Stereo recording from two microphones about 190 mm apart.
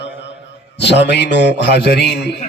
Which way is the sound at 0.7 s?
65° left (ahead or behind).